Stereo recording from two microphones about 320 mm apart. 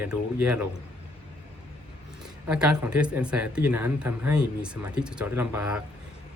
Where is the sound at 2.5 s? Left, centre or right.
Centre.